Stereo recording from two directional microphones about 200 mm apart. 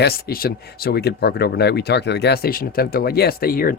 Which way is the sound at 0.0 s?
50° left (ahead or behind).